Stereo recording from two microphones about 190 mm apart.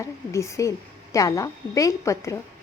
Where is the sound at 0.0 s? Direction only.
15° left (ahead or behind).